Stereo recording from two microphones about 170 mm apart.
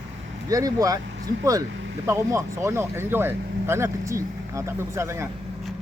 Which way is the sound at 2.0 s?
15° right (ahead or behind).